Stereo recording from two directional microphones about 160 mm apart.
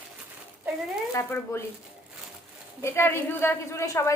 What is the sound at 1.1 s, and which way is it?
Speech, 15° left (ahead or behind).